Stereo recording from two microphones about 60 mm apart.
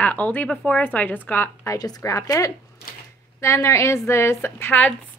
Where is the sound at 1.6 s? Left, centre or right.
Left.